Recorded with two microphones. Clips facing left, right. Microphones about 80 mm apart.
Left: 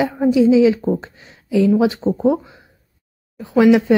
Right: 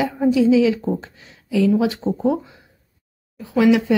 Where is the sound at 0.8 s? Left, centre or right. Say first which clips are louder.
Left 4 dB; centre.